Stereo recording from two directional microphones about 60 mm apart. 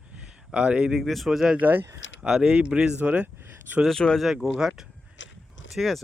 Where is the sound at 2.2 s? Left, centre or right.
Centre.